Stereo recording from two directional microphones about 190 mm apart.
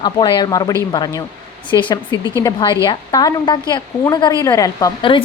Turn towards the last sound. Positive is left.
turn(degrees=25)  # may be behind; listen again after turning